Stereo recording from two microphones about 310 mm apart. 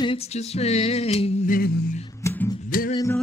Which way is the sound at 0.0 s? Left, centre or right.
Centre.